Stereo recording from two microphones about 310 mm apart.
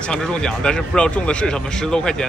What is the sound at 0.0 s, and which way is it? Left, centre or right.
Speech, centre.